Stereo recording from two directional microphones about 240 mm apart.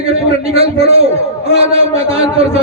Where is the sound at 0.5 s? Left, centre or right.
Right.